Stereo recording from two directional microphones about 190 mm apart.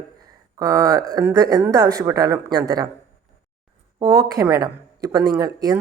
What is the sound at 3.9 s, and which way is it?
Speech, 20° right (ahead or behind).